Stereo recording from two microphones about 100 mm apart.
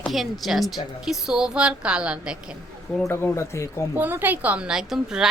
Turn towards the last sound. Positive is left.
turn(degrees=-5)  # may be behind; listen again after turning